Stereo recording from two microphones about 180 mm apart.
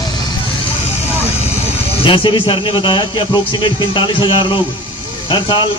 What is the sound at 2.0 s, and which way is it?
A man's voice, 30° left (ahead or behind).